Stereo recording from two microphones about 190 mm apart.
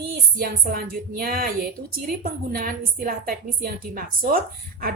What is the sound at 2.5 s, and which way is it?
A woman's voice, 50° right (ahead or behind).